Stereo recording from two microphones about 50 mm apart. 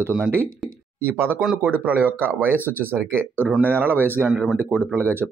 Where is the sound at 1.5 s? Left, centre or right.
Right.